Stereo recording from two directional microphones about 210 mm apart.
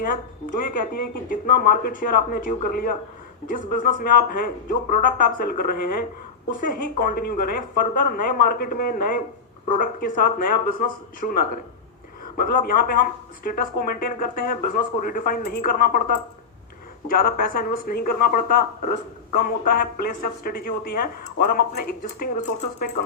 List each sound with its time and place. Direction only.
0.7 s speech: 45° left (ahead or behind)
17.2 s speech: 45° left (ahead or behind)